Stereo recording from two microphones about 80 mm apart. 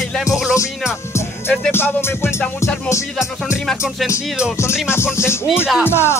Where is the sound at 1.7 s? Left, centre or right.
Left.